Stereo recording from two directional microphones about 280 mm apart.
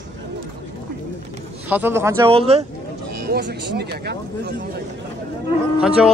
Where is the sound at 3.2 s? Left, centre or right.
Right.